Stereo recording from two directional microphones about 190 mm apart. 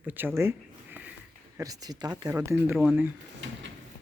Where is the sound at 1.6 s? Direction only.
20° right (ahead or behind).